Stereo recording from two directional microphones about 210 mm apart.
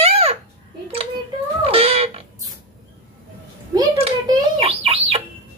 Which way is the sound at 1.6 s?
25° right (ahead or behind).